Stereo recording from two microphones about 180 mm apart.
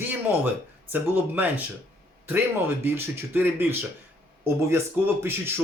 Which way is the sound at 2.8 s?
10° right (ahead or behind).